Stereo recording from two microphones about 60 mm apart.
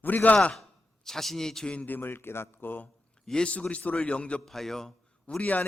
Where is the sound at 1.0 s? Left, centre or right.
Centre.